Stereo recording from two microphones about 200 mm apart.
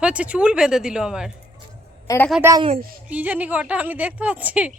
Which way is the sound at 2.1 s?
15° left (ahead or behind).